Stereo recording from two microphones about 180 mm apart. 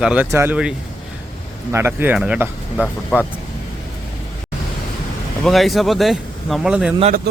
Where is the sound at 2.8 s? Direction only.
5° left (ahead or behind).